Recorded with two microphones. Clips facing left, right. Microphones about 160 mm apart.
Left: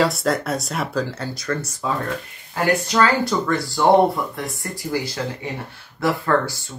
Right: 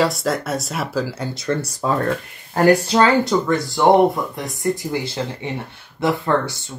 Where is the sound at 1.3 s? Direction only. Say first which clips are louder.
Right 3 dB; 25° right (ahead or behind).